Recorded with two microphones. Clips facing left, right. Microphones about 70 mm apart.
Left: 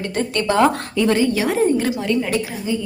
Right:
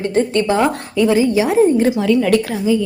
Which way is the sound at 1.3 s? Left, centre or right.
Right.